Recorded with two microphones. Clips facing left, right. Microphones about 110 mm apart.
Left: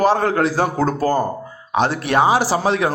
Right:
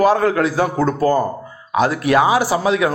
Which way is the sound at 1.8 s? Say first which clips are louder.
Right 2 dB; 30° left (ahead or behind).